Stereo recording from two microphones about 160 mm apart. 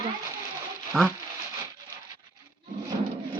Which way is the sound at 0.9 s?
5° left (ahead or behind).